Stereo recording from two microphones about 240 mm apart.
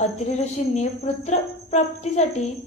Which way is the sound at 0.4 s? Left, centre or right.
Left.